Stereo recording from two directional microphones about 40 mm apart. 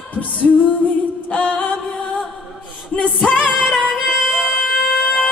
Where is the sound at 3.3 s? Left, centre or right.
Centre.